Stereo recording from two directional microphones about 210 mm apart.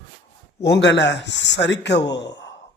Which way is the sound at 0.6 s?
55° left (ahead or behind).